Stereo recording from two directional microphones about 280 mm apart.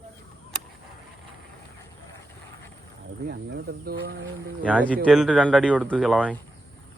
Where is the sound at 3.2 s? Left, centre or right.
Right.